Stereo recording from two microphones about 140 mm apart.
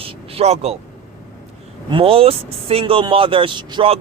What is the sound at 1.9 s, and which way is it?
Speech, 40° right (ahead or behind).